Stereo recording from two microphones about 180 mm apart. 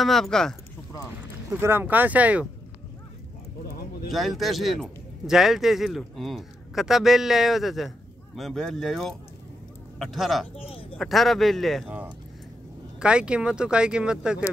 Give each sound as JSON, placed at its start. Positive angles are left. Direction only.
{"t": 0.0, "sound": "speech", "side_deg": 0}
{"t": 1.5, "sound": "speech", "side_deg": -10}
{"t": 4.1, "sound": "speech", "side_deg": 0}
{"t": 10.5, "sound": "speech", "side_deg": 30}
{"t": 11.0, "sound": "speech", "side_deg": 0}